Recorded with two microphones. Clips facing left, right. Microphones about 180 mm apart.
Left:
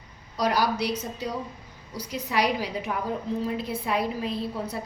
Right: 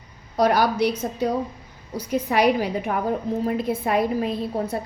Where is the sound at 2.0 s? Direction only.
55° right (ahead or behind).